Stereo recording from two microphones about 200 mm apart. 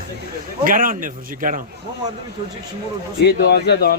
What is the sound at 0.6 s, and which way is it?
A man's voice, 45° right (ahead or behind).